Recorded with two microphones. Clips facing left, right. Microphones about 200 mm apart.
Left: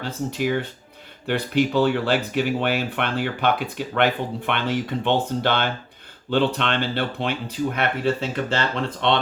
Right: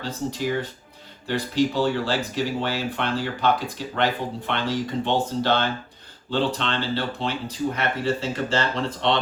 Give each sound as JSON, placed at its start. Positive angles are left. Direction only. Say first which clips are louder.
{"t": 0.0, "sound": "speech", "louder": "left 2 dB", "side_deg": 60}